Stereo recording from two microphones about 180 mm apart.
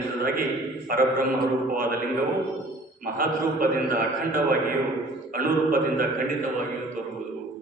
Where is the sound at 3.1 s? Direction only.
50° right (ahead or behind).